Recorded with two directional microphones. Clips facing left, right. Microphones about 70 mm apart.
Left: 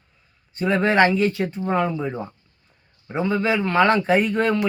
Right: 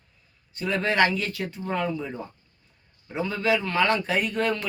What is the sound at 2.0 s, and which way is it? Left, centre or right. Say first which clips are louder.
Speech: left 6 dB; left.